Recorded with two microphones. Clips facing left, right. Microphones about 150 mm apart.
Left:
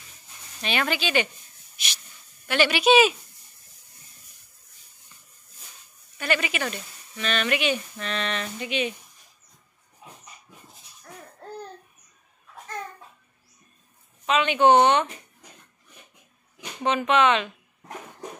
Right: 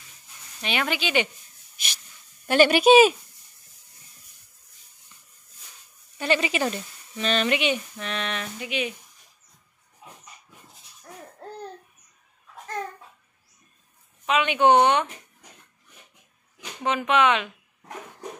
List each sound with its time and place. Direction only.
0.6 s speech: 15° right (ahead or behind)
2.4 s speech: 45° right (ahead or behind)
6.1 s speech: 25° right (ahead or behind); by 8.9 s 10° right (ahead or behind)
14.2 s speech: 10° right (ahead or behind)
16.8 s speech: 10° right (ahead or behind)